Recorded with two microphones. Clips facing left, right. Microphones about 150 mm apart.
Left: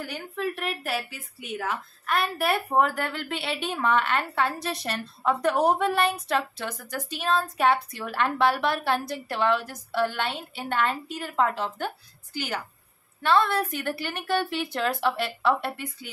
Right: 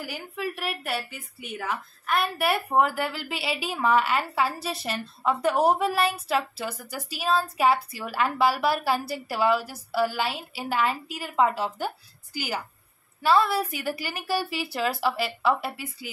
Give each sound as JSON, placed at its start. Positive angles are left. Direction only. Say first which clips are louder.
{"t": 0.0, "sound": "a woman's voice", "louder": "left 2 dB", "side_deg": -5}